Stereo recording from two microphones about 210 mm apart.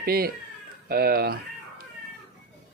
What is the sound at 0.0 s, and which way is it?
Speech, 45° right (ahead or behind).